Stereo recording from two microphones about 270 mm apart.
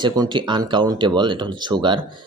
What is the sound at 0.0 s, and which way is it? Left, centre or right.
Speech, centre.